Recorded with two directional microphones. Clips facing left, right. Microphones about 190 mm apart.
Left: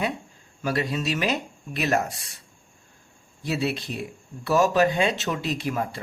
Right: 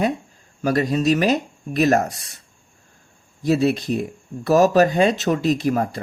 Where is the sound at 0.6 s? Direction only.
40° right (ahead or behind).